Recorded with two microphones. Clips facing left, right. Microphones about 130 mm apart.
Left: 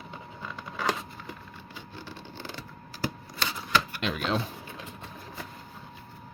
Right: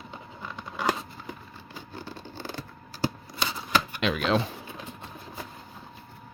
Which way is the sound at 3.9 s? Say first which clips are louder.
Right 4 dB; 90° right.